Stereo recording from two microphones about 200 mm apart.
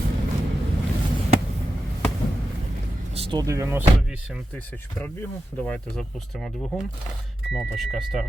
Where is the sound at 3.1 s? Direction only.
25° right (ahead or behind); by 4.4 s 10° right (ahead or behind).